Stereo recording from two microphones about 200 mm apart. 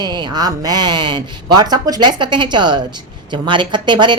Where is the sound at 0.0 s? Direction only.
20° right (ahead or behind).